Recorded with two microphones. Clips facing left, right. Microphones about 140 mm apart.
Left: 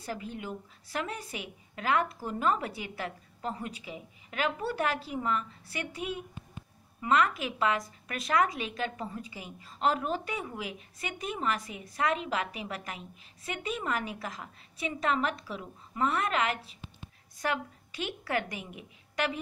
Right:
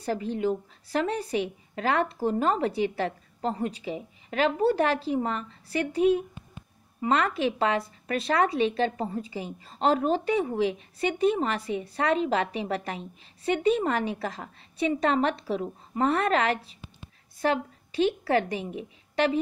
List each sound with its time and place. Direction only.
0.0 s a woman's voice: 35° right (ahead or behind)